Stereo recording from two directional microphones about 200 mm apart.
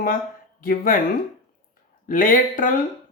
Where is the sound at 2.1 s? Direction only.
45° left (ahead or behind).